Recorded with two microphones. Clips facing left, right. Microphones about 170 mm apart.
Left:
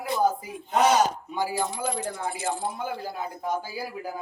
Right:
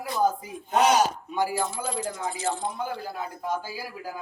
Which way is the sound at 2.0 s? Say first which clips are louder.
Even; 60° left (ahead or behind).